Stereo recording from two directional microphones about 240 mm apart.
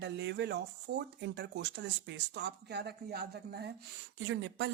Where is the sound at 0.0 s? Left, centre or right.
Right.